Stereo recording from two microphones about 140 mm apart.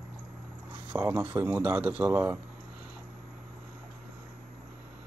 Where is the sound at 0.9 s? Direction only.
20° right (ahead or behind).